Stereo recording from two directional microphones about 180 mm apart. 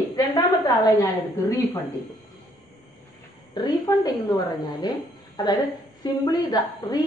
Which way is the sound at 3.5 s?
20° left (ahead or behind).